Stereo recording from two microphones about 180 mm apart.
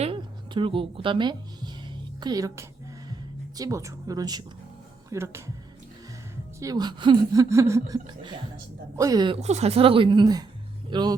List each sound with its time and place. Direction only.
0.0 s music: 30° right (ahead or behind)
2.2 s speech: 20° right (ahead or behind)
6.6 s speech: 20° right (ahead or behind)